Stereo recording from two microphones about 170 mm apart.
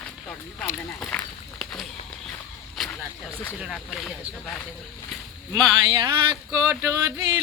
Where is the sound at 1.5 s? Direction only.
Centre (ahead or behind).